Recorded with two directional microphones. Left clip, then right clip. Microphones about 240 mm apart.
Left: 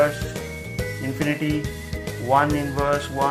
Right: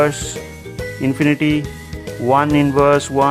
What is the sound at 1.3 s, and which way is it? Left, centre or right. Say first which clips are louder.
Speech: right 7 dB; right.